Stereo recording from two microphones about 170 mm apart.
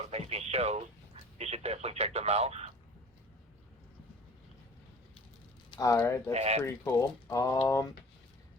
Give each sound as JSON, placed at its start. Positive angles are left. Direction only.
{"t": 0.1, "sound": "speech", "side_deg": -40}
{"t": 5.7, "sound": "speech", "side_deg": 20}
{"t": 6.3, "sound": "speech", "side_deg": -40}
{"t": 6.6, "sound": "speech", "side_deg": 20}